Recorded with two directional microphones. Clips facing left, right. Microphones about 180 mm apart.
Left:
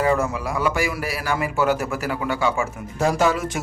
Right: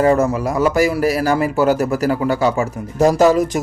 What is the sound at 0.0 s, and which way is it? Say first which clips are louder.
Speech: right 6 dB; 40° right (ahead or behind).